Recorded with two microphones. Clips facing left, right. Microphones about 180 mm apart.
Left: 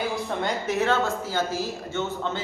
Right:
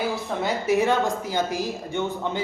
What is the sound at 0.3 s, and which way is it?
Speech, 5° right (ahead or behind).